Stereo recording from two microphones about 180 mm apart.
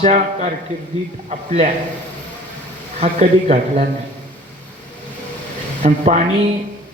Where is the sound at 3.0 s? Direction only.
40° right (ahead or behind).